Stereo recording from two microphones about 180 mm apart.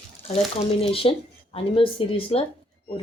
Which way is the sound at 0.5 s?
30° left (ahead or behind).